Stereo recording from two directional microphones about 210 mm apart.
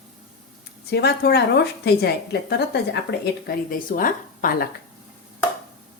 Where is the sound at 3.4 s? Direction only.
40° left (ahead or behind).